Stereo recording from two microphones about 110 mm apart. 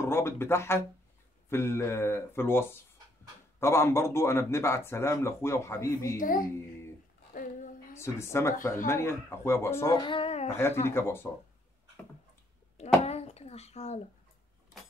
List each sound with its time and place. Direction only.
0.0 s speech: 20° left (ahead or behind)
8.0 s speech: 25° left (ahead or behind)
9.8 s speech: 45° left (ahead or behind)
10.5 s speech: 20° left (ahead or behind)
12.7 s music: 80° left